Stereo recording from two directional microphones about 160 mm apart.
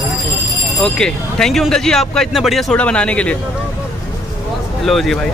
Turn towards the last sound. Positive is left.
turn(degrees=0)  # may be behind; listen again after turning